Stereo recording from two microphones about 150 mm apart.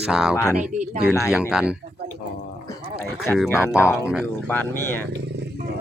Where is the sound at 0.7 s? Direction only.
55° right (ahead or behind).